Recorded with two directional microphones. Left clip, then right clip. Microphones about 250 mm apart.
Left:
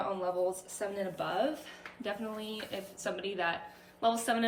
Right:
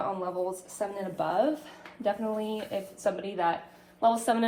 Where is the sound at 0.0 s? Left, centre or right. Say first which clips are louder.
Right 1 dB; centre.